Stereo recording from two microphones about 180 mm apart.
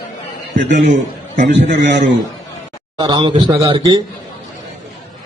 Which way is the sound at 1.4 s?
45° right (ahead or behind).